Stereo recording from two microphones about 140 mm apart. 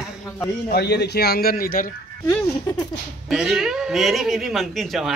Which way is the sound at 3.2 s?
Centre (ahead or behind).